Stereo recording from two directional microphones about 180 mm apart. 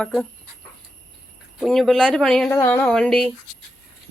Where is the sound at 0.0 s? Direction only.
5° left (ahead or behind).